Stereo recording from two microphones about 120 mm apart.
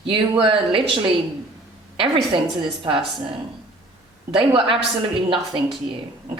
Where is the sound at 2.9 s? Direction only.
40° right (ahead or behind).